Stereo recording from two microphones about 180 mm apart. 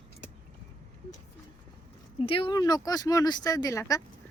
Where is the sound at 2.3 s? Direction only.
30° left (ahead or behind).